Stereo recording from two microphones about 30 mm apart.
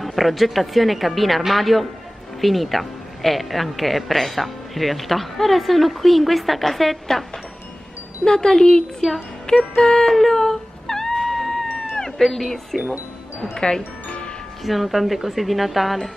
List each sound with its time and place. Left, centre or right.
0.0 s a woman's voice: centre
8.2 s speech: left
10.0 s a sound: centre
11.7 s cat: centre
13.6 s speech: left
14.0 s music: left
14.6 s a woman's voice: centre